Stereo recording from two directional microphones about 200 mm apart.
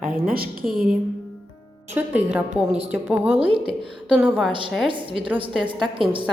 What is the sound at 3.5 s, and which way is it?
Speech, 25° right (ahead or behind).